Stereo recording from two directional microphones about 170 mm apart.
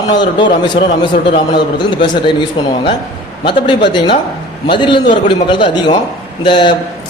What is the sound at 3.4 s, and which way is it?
A man's voice, 30° left (ahead or behind).